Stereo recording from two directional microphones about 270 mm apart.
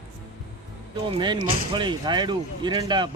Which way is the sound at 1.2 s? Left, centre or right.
Centre.